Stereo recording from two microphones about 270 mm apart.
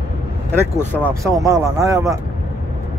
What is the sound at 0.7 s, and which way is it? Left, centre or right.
Speech, centre.